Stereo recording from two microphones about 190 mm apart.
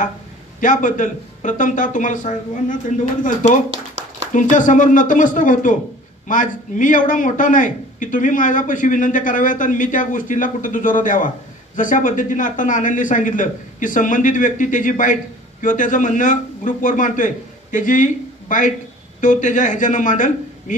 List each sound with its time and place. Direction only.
0.6 s speech: 45° left (ahead or behind)
4.3 s a man's voice: 40° left (ahead or behind)